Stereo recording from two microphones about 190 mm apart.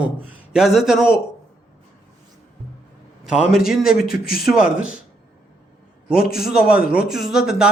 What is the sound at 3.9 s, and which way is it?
Speech, 50° left (ahead or behind).